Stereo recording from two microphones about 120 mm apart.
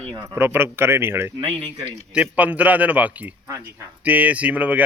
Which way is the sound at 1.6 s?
45° right (ahead or behind).